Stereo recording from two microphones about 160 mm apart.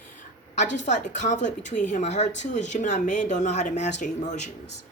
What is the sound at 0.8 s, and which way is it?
Speech, 50° left (ahead or behind).